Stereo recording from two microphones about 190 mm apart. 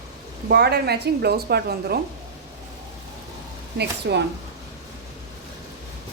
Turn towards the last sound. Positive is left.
turn(degrees=-65)  # may be behind; listen again after turning